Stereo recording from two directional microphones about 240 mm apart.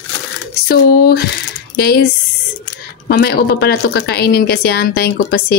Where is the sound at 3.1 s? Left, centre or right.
Left.